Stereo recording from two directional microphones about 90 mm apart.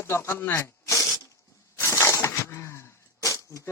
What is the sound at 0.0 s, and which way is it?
Speech, 30° left (ahead or behind).